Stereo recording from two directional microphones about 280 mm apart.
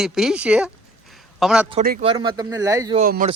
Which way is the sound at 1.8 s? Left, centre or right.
Right.